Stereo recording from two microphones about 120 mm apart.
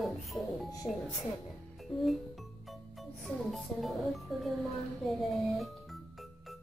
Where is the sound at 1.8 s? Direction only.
Centre (ahead or behind).